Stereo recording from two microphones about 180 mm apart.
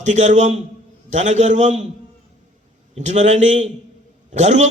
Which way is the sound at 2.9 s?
40° right (ahead or behind).